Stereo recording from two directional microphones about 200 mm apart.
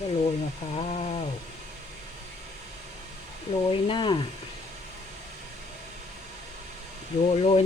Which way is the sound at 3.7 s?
25° left (ahead or behind).